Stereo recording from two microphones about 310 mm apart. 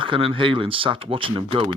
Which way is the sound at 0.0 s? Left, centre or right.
Centre.